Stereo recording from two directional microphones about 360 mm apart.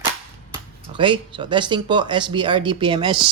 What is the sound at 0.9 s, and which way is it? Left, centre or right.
Speech, centre.